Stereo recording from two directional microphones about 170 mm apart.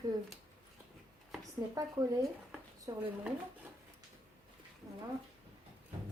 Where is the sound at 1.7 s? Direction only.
20° right (ahead or behind).